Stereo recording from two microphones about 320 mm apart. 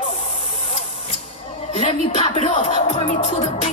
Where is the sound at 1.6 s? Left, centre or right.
Centre.